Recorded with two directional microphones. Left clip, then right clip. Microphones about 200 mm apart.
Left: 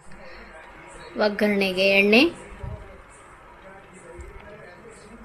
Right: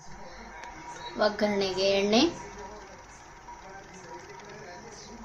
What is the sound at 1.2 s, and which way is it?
A woman's voice, 35° left (ahead or behind).